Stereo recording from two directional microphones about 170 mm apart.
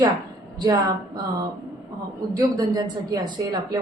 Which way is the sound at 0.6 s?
25° right (ahead or behind).